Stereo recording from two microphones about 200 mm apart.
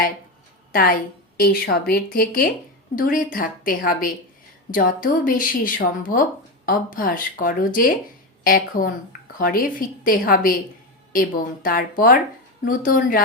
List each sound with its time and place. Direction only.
0.7 s a woman's voice: 45° left (ahead or behind)